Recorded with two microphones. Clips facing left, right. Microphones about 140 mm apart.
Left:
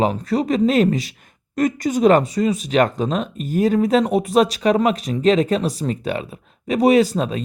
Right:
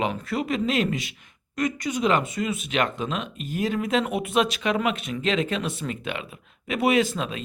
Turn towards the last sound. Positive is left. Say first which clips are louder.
# left 7 dB
turn(degrees=40)  # may be behind; listen again after turning